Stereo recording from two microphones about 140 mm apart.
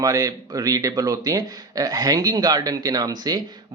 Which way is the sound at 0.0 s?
25° right (ahead or behind).